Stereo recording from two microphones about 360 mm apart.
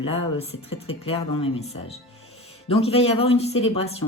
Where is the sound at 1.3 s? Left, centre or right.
Centre.